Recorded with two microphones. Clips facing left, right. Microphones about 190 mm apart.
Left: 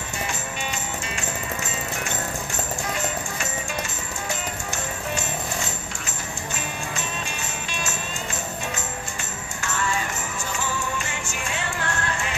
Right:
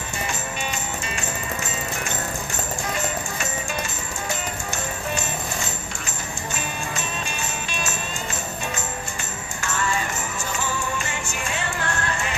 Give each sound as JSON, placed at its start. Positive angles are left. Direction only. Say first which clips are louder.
{"t": 11.1, "sound": "music", "louder": "right 2 dB", "side_deg": -45}